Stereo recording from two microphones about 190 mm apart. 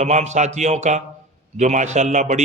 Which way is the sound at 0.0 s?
35° right (ahead or behind).